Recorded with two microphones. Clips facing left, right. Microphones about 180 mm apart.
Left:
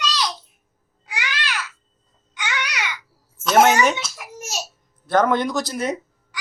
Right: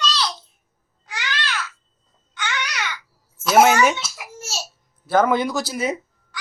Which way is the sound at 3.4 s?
5° right (ahead or behind).